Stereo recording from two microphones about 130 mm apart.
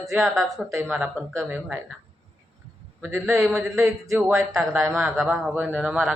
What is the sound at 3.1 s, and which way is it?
Speech, centre (ahead or behind).